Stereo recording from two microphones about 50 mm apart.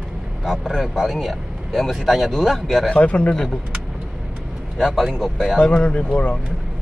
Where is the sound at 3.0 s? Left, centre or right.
Left.